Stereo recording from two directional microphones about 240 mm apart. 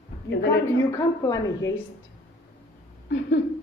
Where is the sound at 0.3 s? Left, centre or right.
Left.